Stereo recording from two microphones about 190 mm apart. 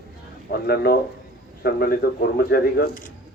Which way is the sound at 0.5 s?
55° left (ahead or behind).